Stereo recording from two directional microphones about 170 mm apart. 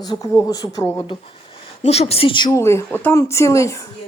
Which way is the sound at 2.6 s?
15° left (ahead or behind).